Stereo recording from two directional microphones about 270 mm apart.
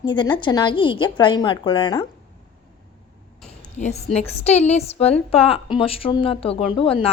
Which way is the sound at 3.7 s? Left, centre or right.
Left.